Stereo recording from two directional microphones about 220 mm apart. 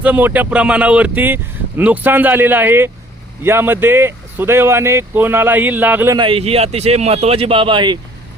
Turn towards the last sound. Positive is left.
turn(degrees=-20)  # may be behind; listen again after turning